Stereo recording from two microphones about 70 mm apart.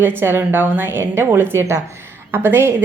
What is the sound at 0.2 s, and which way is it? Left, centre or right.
A woman's voice, right.